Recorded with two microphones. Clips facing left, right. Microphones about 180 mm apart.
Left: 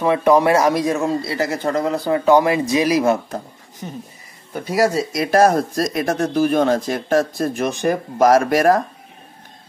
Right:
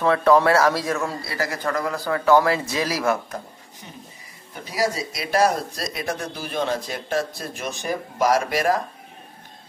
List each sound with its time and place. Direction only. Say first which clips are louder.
0.0 s speech: left 2 dB; 15° left (ahead or behind)
4.6 s speech: left 7 dB; 50° left (ahead or behind)